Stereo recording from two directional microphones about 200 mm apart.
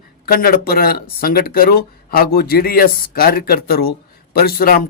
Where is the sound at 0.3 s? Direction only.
50° left (ahead or behind).